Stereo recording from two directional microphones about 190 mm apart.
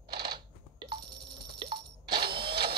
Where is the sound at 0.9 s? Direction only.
55° right (ahead or behind).